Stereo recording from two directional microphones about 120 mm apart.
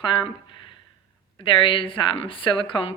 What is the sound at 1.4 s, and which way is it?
A woman's voice, 45° left (ahead or behind).